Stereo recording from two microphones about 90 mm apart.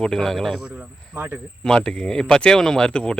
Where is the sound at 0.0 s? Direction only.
5° left (ahead or behind).